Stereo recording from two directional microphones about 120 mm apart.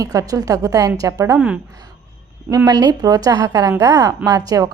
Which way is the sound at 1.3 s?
10° right (ahead or behind).